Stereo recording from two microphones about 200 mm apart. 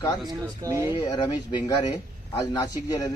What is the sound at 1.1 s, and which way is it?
A man's voice, 20° left (ahead or behind).